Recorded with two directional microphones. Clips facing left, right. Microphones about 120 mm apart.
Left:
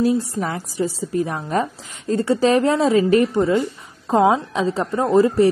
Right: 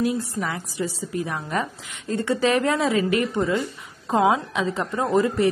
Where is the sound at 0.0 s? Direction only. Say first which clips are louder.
Left 5 dB; 35° left (ahead or behind).